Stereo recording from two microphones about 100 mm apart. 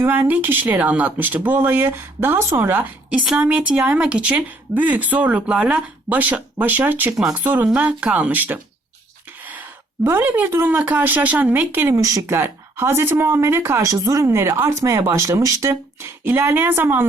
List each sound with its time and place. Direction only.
0.0 s speech: 15° right (ahead or behind)
9.4 s a sound: 15° right (ahead or behind)
10.0 s speech: 20° right (ahead or behind)
11.9 s speech: 35° right (ahead or behind)